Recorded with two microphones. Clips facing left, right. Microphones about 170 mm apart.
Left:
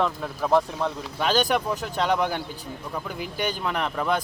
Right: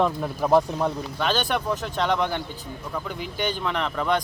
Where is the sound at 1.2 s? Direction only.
10° left (ahead or behind).